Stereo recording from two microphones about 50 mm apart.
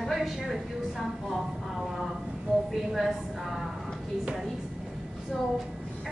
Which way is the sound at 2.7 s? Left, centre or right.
Centre.